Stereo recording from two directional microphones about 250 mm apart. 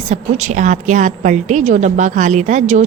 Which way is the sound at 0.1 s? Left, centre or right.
Right.